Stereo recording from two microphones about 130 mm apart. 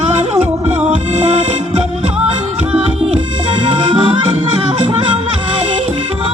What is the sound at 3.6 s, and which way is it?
Music, 40° right (ahead or behind).